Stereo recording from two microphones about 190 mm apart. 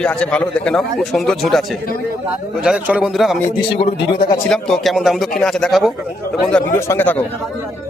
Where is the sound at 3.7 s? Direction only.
30° left (ahead or behind).